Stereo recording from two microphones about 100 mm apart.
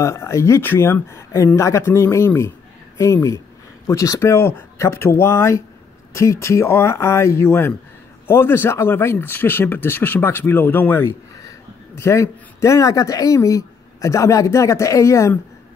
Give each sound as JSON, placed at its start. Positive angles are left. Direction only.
{"t": 0.0, "sound": "speech", "side_deg": 30}